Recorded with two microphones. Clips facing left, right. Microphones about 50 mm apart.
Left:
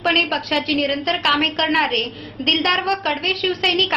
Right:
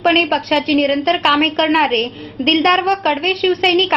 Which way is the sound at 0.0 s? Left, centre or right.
Right.